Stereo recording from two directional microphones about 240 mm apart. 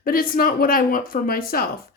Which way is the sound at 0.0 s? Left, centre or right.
Left.